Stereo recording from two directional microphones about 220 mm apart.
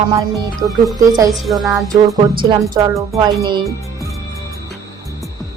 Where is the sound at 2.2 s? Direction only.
20° right (ahead or behind).